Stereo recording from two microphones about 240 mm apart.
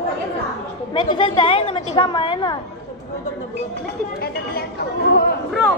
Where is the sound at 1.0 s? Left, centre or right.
Left.